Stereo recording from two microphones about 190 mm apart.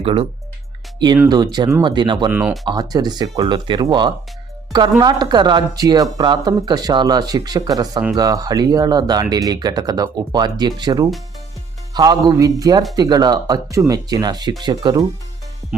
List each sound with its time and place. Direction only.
0.0 s speech: 30° right (ahead or behind)
2.3 s speech: 5° right (ahead or behind)
2.6 s speech: 20° right (ahead or behind)